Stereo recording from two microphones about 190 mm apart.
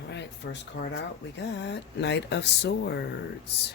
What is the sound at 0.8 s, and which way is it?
Speech, 90° left.